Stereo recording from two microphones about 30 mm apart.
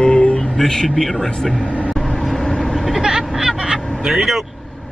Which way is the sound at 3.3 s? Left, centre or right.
Centre.